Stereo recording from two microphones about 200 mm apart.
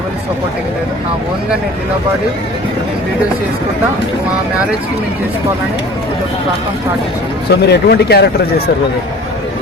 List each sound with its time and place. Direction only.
7.5 s speech: 55° left (ahead or behind)